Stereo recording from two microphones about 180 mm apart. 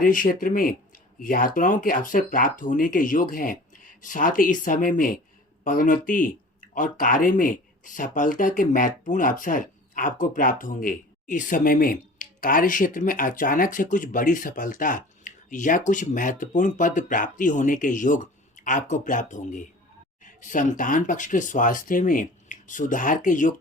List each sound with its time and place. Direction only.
0.0 s speech: 50° left (ahead or behind)